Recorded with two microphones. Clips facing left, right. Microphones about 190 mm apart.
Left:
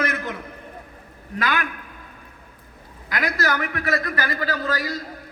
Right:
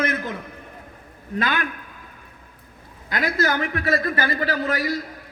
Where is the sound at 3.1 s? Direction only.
25° right (ahead or behind).